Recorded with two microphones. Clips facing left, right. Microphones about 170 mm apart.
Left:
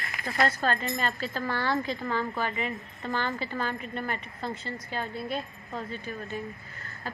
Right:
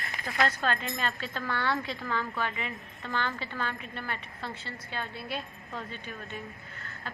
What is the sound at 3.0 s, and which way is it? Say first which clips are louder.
Speech: left 3 dB; 15° left (ahead or behind).